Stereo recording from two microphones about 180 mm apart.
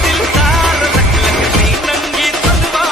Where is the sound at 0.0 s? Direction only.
Centre (ahead or behind).